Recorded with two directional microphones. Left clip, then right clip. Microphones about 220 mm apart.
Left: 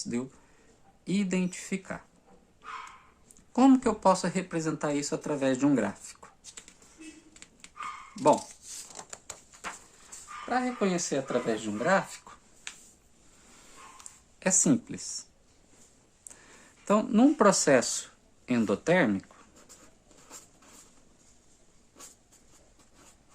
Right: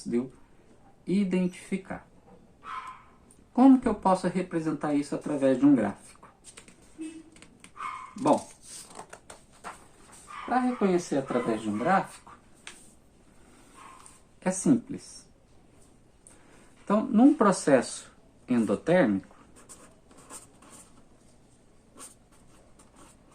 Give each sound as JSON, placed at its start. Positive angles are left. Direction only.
{"t": 1.0, "sound": "speech", "side_deg": 50}
{"t": 3.5, "sound": "speech", "side_deg": 50}
{"t": 6.6, "sound": "a sound", "side_deg": 10}
{"t": 8.2, "sound": "speech", "side_deg": 10}
{"t": 10.5, "sound": "speech", "side_deg": 55}
{"t": 12.7, "sound": "a sound", "side_deg": 15}
{"t": 14.3, "sound": "speech", "side_deg": 50}
{"t": 16.8, "sound": "speech", "side_deg": 45}